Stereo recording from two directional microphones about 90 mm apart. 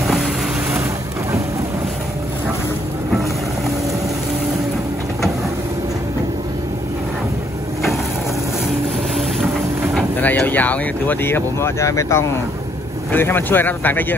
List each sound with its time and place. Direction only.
0.0 s vehicle: 5° right (ahead or behind)
10.2 s speech: 20° left (ahead or behind)
13.1 s speech: 25° left (ahead or behind)